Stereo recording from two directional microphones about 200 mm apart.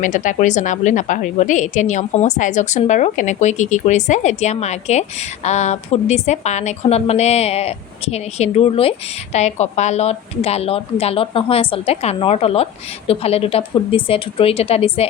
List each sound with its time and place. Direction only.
0.0 s a woman's voice: 40° left (ahead or behind)